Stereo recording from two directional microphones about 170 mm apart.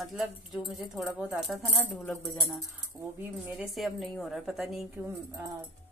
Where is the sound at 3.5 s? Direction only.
Centre (ahead or behind).